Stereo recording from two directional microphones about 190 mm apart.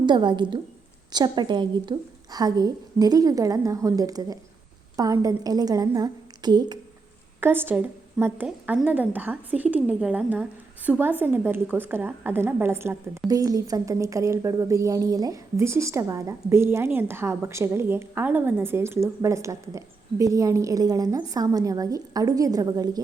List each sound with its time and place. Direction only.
0.0 s a woman's voice: 25° right (ahead or behind)
7.4 s a woman's voice: 10° right (ahead or behind)